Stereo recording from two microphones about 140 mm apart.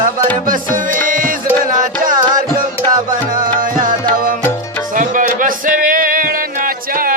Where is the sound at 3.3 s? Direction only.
75° right (ahead or behind).